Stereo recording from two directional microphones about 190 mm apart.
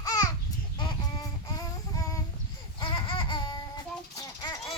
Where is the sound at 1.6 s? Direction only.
20° left (ahead or behind).